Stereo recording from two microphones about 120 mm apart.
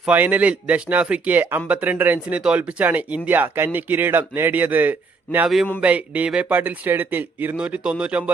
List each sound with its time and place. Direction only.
0.0 s speech: 15° right (ahead or behind)